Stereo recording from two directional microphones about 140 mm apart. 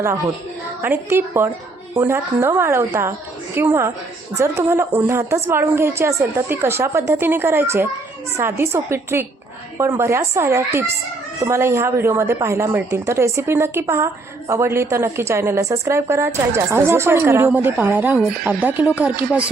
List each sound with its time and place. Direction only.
0.8 s a woman's voice: 15° right (ahead or behind)